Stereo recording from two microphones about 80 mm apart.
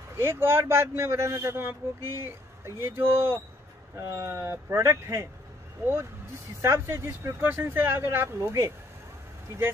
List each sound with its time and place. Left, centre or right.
0.2 s a man's voice: right
6.6 s a man's voice: right